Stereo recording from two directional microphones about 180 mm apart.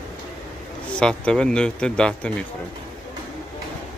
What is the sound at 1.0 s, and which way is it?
Speech, 5° left (ahead or behind).